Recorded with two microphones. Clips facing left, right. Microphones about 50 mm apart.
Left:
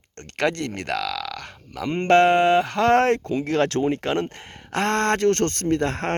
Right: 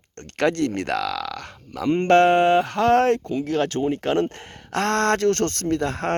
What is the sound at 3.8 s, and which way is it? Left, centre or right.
Speech, left.